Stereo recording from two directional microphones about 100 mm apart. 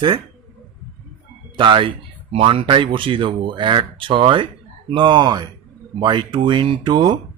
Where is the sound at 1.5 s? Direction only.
55° right (ahead or behind).